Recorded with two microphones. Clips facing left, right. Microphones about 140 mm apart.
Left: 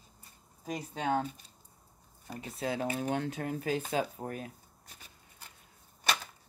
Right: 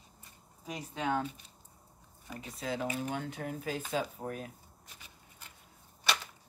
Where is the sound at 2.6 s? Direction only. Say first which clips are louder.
Left 2 dB; 55° left (ahead or behind).